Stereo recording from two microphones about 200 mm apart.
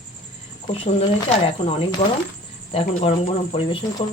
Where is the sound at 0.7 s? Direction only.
30° left (ahead or behind).